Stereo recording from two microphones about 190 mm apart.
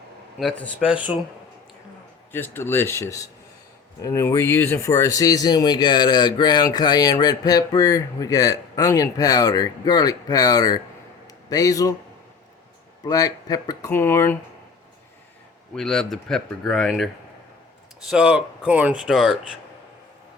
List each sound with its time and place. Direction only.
0.3 s speech: 5° left (ahead or behind)
2.3 s a man's voice: 10° left (ahead or behind)
13.1 s speech: 20° left (ahead or behind)
15.7 s speech: centre (ahead or behind)
18.1 s speech: 5° right (ahead or behind)